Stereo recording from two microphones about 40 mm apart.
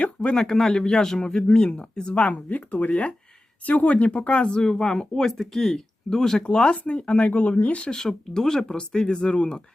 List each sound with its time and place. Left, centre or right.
0.0 s a sound: left
0.3 s speech: centre
6.4 s speech: left
7.9 s speech: centre